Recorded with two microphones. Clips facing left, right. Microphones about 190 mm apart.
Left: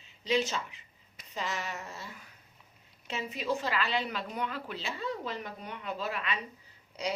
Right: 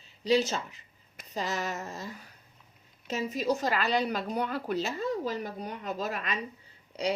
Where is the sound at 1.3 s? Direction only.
40° right (ahead or behind).